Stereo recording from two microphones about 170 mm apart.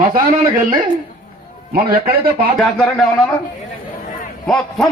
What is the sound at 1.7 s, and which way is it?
Speech, 60° right (ahead or behind).